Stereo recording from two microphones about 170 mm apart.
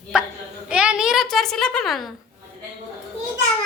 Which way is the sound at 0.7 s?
5° right (ahead or behind).